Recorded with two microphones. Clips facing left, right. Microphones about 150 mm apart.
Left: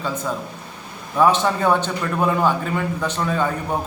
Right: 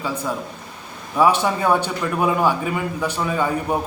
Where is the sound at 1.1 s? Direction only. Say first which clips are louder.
Even; 10° right (ahead or behind).